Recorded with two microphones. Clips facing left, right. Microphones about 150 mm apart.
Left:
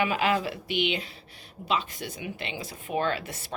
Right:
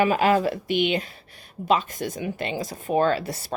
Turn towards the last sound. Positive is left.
turn(degrees=-35)  # may be behind; listen again after turning